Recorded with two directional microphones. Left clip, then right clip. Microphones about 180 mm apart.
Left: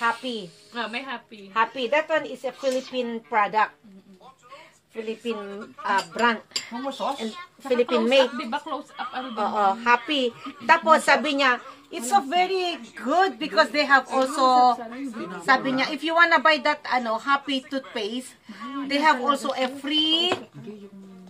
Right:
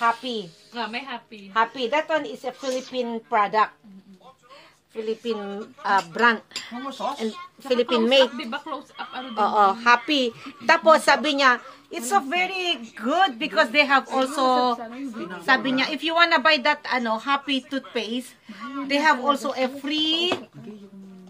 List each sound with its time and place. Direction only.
0.0 s a sound: 45° right (ahead or behind)
0.7 s a woman's voice: 10° right (ahead or behind)
1.5 s speech: 45° right (ahead or behind)
5.2 s a woman's voice: 45° right (ahead or behind)
8.4 s speech: 10° left (ahead or behind)
9.3 s a woman's voice: 45° right (ahead or behind); by 20.2 s 25° right (ahead or behind)